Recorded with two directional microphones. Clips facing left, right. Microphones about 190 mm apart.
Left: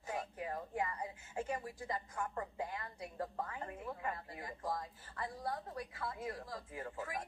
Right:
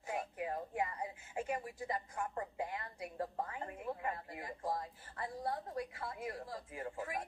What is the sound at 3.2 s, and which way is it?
Speech, 25° right (ahead or behind).